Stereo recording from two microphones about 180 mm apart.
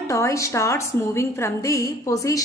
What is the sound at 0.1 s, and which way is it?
A woman's voice, 15° left (ahead or behind).